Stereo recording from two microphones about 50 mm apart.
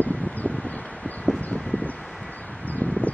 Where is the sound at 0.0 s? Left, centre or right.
Left.